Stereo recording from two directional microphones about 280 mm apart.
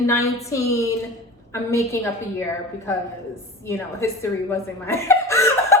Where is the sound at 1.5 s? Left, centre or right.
Centre.